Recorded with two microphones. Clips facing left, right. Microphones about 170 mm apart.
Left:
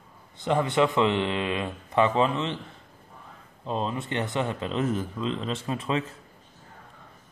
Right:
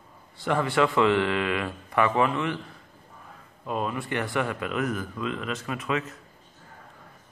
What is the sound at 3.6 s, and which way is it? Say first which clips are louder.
Speech: even; 25° left (ahead or behind).